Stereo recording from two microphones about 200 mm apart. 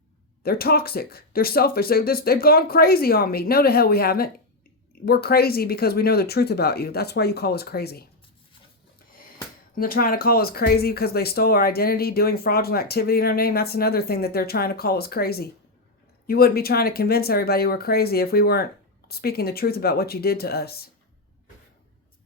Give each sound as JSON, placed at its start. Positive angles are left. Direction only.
{"t": 0.4, "sound": "speech", "side_deg": 50}
{"t": 9.7, "sound": "speech", "side_deg": 45}